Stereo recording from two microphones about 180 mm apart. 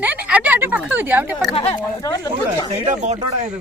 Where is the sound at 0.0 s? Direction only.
10° right (ahead or behind).